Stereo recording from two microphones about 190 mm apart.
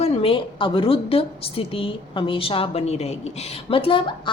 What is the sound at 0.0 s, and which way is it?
A woman's voice, 30° left (ahead or behind).